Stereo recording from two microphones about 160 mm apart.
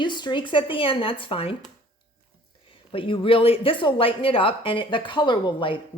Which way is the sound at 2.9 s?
35° left (ahead or behind).